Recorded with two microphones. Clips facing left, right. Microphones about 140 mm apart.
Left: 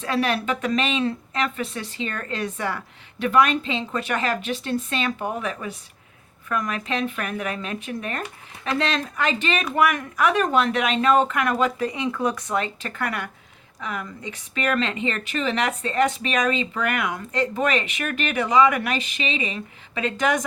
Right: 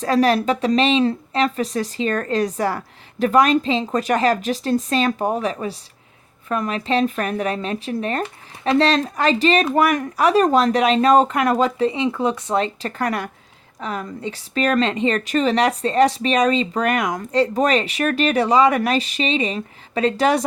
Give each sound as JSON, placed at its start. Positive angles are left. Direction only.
{"t": 0.0, "sound": "a woman's voice", "side_deg": -40}